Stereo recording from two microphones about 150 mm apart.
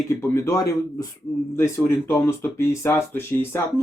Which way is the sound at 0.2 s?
20° left (ahead or behind).